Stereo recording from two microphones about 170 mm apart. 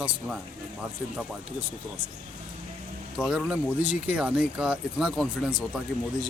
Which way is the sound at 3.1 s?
5° right (ahead or behind).